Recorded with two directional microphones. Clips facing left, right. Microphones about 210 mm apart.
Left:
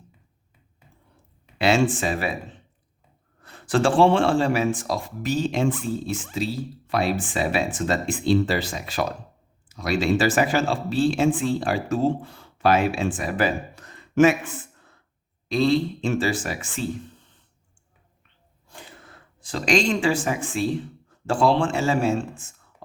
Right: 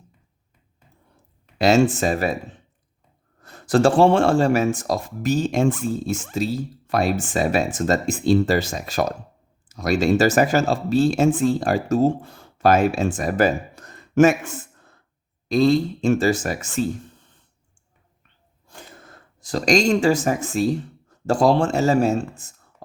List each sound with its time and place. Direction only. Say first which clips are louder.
1.5 s speech: right 4 dB; 40° right (ahead or behind)
3.4 s speech: right 4 dB; 40° right (ahead or behind)
18.8 s speech: right 2 dB; 45° right (ahead or behind)